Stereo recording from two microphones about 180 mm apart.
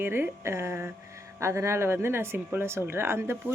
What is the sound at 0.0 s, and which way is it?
Speech, 10° right (ahead or behind).